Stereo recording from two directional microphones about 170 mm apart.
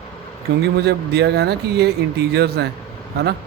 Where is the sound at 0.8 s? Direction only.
75° right (ahead or behind).